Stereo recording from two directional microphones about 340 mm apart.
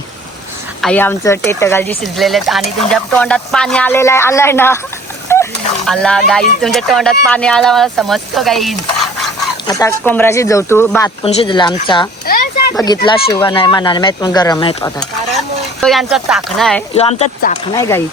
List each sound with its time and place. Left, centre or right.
0.8 s speech: centre
12.2 s a sound: left
12.8 s speech: centre
15.8 s speech: centre
16.9 s speech: centre
17.7 s speech: centre